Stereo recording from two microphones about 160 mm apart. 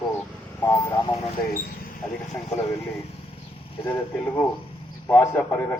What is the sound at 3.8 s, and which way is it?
A man's voice, 20° left (ahead or behind).